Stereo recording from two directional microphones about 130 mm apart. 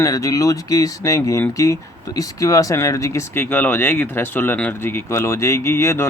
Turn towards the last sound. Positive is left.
turn(degrees=20)  # may be behind; listen again after turning